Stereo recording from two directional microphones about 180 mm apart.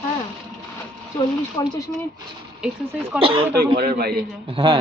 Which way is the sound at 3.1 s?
30° right (ahead or behind).